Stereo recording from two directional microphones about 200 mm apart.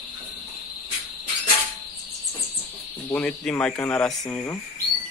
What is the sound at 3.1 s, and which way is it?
A man's voice, 5° left (ahead or behind).